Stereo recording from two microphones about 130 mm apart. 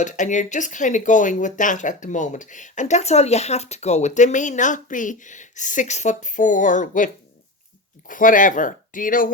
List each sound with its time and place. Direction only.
0.0 s speech: 70° left (ahead or behind); by 9.3 s 90° left